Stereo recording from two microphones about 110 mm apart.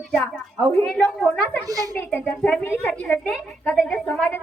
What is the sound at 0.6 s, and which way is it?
Speech, 10° left (ahead or behind).